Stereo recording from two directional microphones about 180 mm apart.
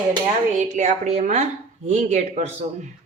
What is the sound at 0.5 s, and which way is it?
A woman's voice, 40° right (ahead or behind).